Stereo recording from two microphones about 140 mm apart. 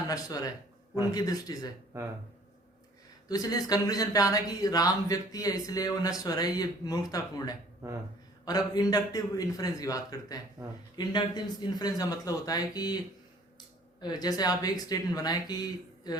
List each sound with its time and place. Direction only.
0.1 s speech: 25° left (ahead or behind)
3.2 s speech: 25° left (ahead or behind)
14.0 s speech: 30° left (ahead or behind)